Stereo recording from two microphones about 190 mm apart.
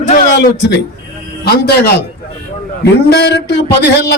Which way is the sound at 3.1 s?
60° left (ahead or behind).